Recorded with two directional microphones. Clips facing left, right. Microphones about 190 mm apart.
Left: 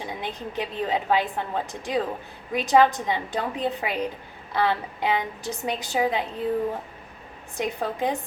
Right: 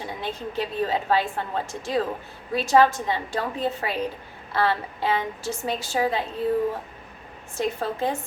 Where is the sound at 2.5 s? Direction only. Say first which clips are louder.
Even; 15° left (ahead or behind).